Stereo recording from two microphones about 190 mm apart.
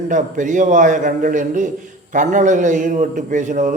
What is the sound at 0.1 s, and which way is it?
A man's voice, 40° right (ahead or behind).